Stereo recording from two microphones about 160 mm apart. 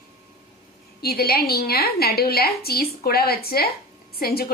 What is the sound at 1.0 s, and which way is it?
A woman's voice, 70° left (ahead or behind).